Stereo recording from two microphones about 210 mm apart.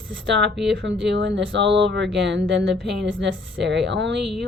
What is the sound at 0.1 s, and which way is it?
Speech, 60° right (ahead or behind).